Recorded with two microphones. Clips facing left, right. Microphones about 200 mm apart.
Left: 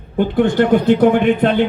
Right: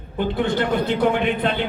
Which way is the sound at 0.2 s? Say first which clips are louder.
Left 7 dB; 50° left (ahead or behind).